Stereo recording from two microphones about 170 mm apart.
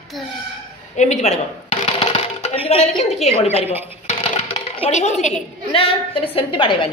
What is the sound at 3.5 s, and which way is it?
Speech, 10° right (ahead or behind).